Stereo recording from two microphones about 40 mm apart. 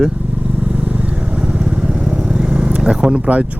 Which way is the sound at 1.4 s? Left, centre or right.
Right.